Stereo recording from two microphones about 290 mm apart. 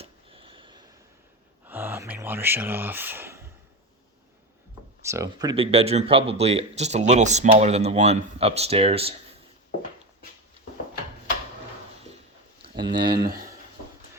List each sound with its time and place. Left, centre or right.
0.0 s a sound: centre
5.0 s speech: centre
12.8 s speech: centre
13.1 s speech: right